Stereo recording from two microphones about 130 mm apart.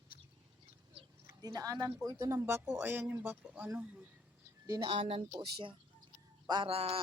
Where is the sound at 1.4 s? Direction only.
30° right (ahead or behind); by 4.0 s 10° right (ahead or behind).